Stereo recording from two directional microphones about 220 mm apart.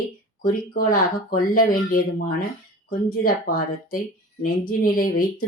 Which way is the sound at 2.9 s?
40° left (ahead or behind).